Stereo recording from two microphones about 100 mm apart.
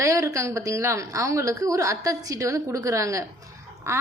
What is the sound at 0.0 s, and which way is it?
A woman's voice, 35° right (ahead or behind).